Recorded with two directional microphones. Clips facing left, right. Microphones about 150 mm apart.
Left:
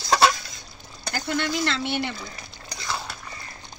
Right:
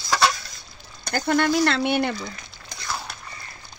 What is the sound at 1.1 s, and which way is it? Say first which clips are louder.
Speech: right 6 dB; 50° right (ahead or behind).